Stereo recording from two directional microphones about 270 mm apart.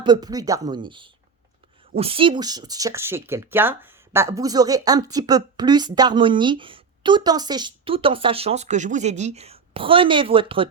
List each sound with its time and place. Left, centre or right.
0.0 s speech: centre